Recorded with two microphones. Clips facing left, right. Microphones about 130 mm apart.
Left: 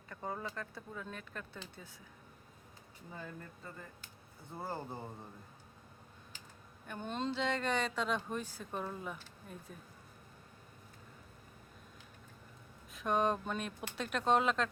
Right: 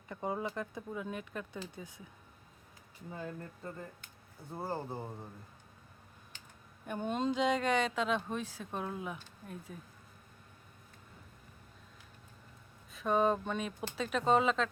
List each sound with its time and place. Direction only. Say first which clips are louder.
0.1 s a sound: right 5 dB; 15° right (ahead or behind)
0.5 s speech: right 5 dB; 15° right (ahead or behind)
3.1 s speech: right 5 dB; 15° right (ahead or behind)
4.5 s speech: right 3 dB; 15° right (ahead or behind)
6.8 s speech: right 5 dB; 15° right (ahead or behind)
12.9 s speech: right 3 dB; centre (ahead or behind)